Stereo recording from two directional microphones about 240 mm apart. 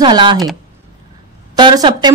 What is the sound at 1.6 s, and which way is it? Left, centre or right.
Speech, centre.